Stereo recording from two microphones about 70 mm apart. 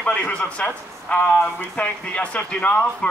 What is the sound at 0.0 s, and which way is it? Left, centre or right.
Speech, centre.